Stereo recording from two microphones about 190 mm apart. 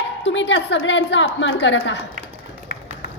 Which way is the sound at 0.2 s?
70° left (ahead or behind).